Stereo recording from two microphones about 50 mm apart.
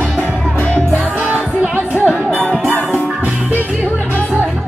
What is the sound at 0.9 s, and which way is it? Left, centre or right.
Music, right.